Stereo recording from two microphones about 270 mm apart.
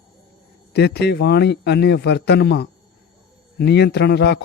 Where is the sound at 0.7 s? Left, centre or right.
Left.